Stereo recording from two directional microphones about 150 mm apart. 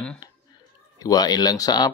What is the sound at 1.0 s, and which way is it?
Speech, 25° left (ahead or behind).